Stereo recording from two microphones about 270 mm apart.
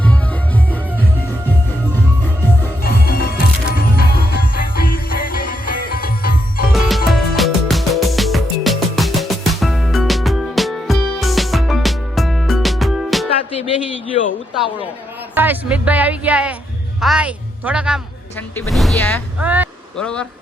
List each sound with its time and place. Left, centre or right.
0.0 s music: centre
2.2 s music: centre
2.8 s music: left
6.8 s music: centre
15.4 s music: centre
17.0 s speech: centre
19.4 s speech: centre